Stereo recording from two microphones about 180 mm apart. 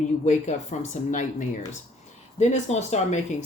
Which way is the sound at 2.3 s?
40° left (ahead or behind).